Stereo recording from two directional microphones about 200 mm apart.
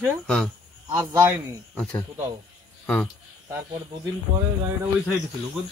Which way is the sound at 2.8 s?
5° left (ahead or behind).